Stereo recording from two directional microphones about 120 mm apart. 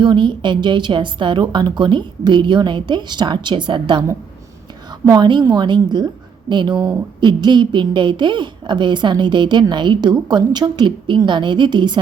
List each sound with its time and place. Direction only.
0.0 s a woman's voice: 40° right (ahead or behind)
5.0 s a woman's voice: 35° right (ahead or behind)